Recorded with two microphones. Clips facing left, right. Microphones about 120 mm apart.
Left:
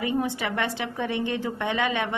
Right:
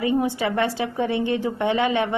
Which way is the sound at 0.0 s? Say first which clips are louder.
Right 5 dB; 30° right (ahead or behind).